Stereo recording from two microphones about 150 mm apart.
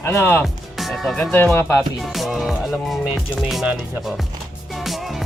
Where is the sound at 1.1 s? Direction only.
10° left (ahead or behind).